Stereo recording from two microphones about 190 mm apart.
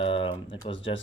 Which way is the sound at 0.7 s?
75° left (ahead or behind).